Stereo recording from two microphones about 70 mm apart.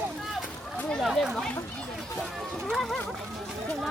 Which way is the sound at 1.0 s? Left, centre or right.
Centre.